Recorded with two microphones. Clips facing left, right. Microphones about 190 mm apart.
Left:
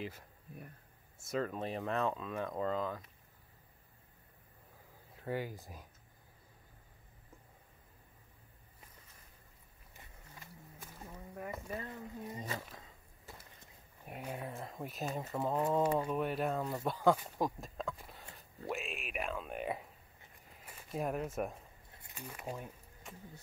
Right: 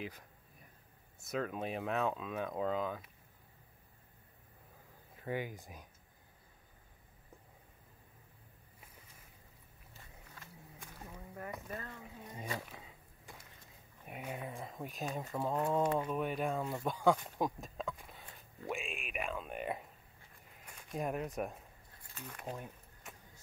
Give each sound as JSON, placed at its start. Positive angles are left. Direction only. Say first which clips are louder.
{"t": 0.0, "sound": "speech", "louder": "left 1 dB", "side_deg": 0}
{"t": 5.1, "sound": "speech", "louder": "even", "side_deg": 0}
{"t": 10.8, "sound": "boat", "louder": "even", "side_deg": 5}
{"t": 11.3, "sound": "speech", "louder": "left 2 dB", "side_deg": 0}
{"t": 11.7, "sound": "speech", "louder": "left 3 dB", "side_deg": 20}
{"t": 12.4, "sound": "speech", "louder": "even", "side_deg": -10}
{"t": 13.3, "sound": "a sound", "louder": "left 1 dB", "side_deg": 0}
{"t": 14.0, "sound": "speech", "louder": "left 1 dB", "side_deg": 0}
{"t": 21.9, "sound": "a sound", "louder": "left 2 dB", "side_deg": 20}
{"t": 22.2, "sound": "speech", "louder": "left 1 dB", "side_deg": 5}